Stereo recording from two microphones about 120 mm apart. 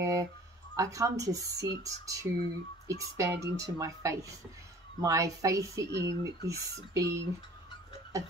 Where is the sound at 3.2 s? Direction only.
25° right (ahead or behind).